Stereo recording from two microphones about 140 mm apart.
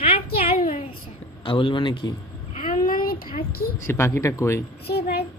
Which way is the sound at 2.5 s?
75° left (ahead or behind).